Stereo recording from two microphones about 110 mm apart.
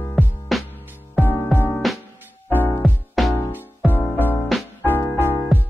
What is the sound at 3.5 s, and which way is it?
Music, 15° left (ahead or behind).